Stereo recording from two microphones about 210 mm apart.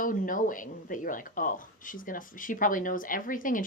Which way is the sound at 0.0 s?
40° left (ahead or behind).